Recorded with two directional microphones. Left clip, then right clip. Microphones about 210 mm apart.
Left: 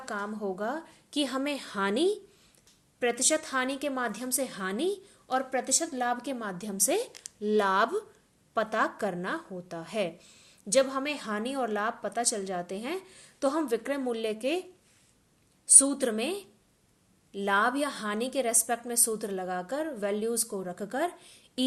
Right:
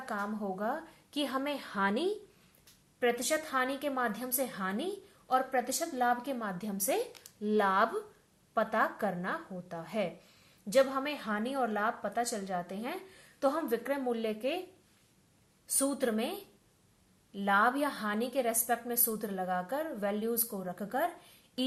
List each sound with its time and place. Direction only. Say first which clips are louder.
0.0 s a woman's voice: left 2 dB; 40° left (ahead or behind)
15.8 s a woman's voice: left 3 dB; 35° left (ahead or behind)